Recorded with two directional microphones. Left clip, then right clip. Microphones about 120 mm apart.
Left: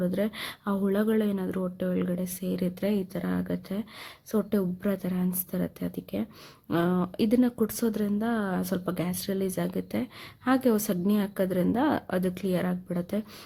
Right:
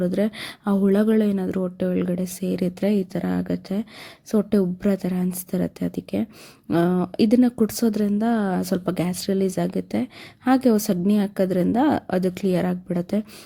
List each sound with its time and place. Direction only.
0.0 s speech: 30° right (ahead or behind)